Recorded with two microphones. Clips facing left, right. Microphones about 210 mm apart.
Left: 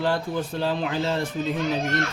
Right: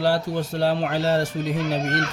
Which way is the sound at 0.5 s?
70° right (ahead or behind).